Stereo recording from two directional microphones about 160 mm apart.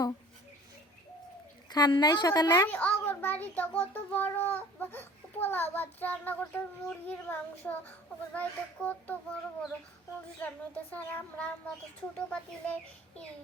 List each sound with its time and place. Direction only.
1.7 s a woman's voice: 25° left (ahead or behind)
2.6 s a child's voice: 10° left (ahead or behind)
10.4 s a child's voice: 10° left (ahead or behind)